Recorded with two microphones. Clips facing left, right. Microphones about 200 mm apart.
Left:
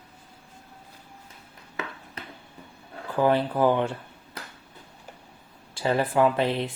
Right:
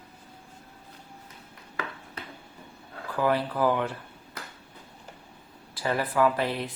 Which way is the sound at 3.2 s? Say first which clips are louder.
Left 4 dB; 25° left (ahead or behind).